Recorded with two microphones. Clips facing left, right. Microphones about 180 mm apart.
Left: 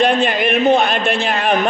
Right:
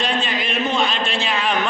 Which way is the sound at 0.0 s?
60° left (ahead or behind).